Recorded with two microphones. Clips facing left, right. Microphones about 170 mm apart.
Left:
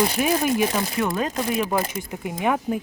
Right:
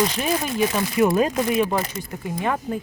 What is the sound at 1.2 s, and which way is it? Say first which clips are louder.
Speech: right 4 dB; 15° right (ahead or behind).